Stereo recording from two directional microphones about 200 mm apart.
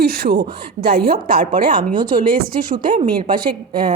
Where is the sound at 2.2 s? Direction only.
25° right (ahead or behind).